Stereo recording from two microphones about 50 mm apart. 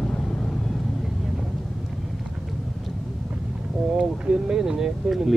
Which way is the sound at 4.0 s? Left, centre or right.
Centre.